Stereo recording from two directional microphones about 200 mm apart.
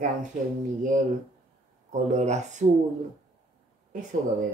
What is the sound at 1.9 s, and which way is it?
Speech, 35° right (ahead or behind).